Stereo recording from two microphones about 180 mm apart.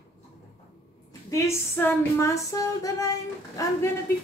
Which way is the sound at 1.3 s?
15° left (ahead or behind).